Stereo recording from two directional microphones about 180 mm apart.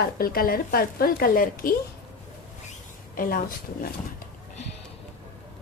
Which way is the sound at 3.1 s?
50° left (ahead or behind).